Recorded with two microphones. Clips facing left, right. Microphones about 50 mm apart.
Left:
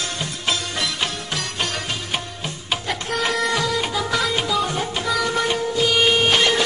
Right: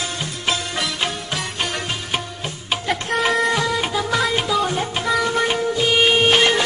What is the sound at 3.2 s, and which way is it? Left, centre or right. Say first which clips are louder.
Printer: right 3 dB; centre.